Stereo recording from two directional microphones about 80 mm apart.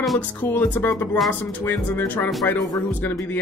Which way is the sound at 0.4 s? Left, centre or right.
Left.